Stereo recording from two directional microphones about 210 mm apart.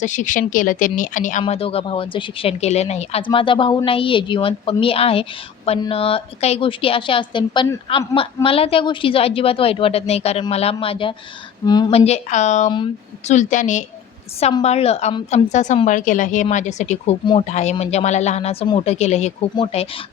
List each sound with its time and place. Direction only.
0.0 s a woman's voice: 35° left (ahead or behind)